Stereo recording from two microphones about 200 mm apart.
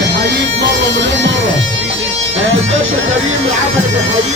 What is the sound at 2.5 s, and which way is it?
Speech, 75° right (ahead or behind).